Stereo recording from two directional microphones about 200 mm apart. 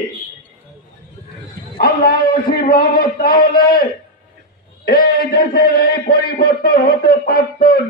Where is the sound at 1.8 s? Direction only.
45° left (ahead or behind).